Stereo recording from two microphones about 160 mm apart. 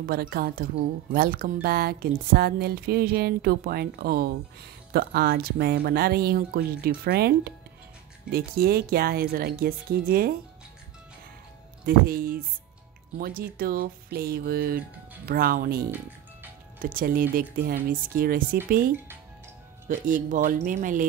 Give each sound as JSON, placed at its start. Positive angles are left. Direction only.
{"t": 0.0, "sound": "speech", "side_deg": -70}
{"t": 8.3, "sound": "speech", "side_deg": -70}
{"t": 11.8, "sound": "speech", "side_deg": -65}